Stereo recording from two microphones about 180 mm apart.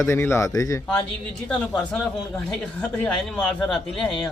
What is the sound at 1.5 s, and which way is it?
Speech, 5° left (ahead or behind).